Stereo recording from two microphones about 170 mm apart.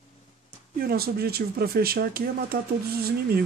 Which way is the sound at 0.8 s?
65° right (ahead or behind).